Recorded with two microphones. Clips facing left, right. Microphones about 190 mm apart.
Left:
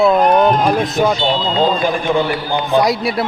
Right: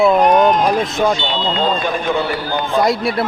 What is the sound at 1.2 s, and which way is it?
Speech, 40° left (ahead or behind).